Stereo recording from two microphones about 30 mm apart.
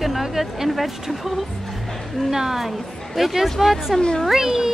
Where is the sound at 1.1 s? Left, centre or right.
Centre.